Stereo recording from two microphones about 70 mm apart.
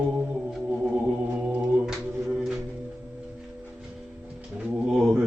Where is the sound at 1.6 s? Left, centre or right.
Centre.